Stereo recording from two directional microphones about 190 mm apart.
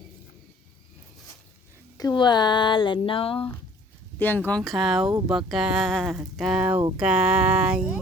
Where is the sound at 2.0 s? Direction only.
20° left (ahead or behind).